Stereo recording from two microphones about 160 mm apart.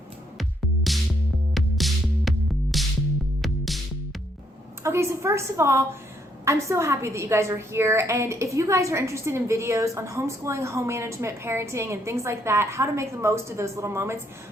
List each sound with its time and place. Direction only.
1.5 s music: centre (ahead or behind)
4.8 s a woman's voice: 15° right (ahead or behind)